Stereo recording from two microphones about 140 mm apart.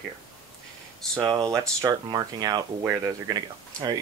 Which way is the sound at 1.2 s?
25° right (ahead or behind).